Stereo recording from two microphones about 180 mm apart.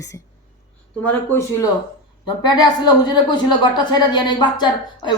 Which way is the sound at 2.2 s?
25° left (ahead or behind).